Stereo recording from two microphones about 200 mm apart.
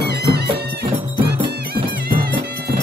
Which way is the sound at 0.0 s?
55° right (ahead or behind).